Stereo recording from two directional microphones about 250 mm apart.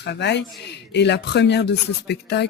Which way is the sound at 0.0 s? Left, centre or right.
Left.